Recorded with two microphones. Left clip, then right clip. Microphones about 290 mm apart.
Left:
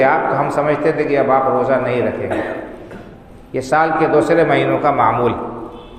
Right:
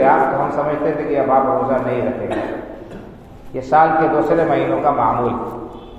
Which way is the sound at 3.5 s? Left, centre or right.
Left.